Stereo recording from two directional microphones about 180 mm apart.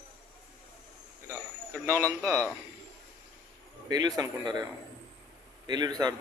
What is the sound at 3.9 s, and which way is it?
Speech, 20° right (ahead or behind).